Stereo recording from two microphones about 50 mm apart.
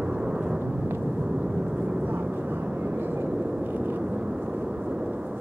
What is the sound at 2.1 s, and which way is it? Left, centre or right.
Vehicle, right.